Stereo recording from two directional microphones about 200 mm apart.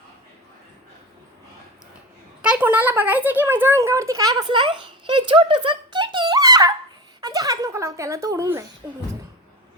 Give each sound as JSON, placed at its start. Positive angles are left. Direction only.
{"t": 2.4, "sound": "a child's voice", "side_deg": -5}